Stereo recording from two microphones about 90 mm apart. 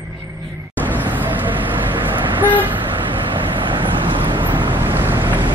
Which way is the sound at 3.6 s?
65° right (ahead or behind).